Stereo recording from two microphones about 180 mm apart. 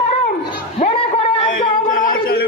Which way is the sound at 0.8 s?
30° left (ahead or behind).